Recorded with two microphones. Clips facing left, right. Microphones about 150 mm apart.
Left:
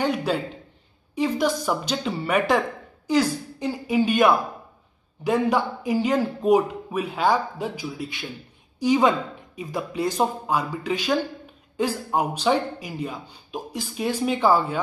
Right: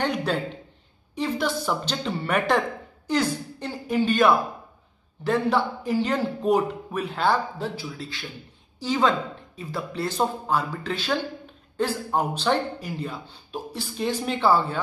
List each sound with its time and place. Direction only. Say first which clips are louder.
0.0 s a woman's voice: left 2 dB; 10° left (ahead or behind)